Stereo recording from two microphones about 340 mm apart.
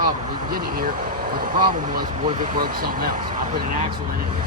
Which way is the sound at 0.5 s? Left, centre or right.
Right.